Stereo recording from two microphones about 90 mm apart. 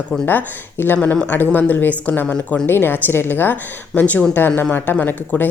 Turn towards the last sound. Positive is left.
turn(degrees=20)  # may be behind; listen again after turning